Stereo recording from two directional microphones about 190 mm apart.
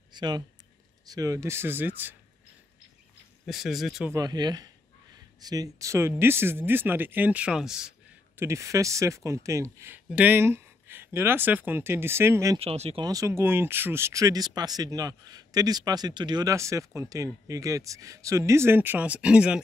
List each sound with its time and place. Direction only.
0.1 s a sound: 20° right (ahead or behind)
1.0 s speech: 20° right (ahead or behind)
3.4 s speech: centre (ahead or behind)
4.1 s speech: 20° right (ahead or behind); by 7.9 s 5° right (ahead or behind)
8.4 s speech: 15° right (ahead or behind)
12.5 s speech: 30° right (ahead or behind)
13.0 s speech: 15° right (ahead or behind)